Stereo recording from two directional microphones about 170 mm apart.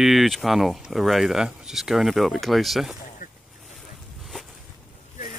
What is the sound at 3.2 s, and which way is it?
Boat, 50° left (ahead or behind).